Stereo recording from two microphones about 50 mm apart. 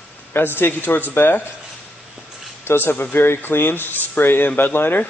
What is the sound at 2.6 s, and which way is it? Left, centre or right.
Speech, left.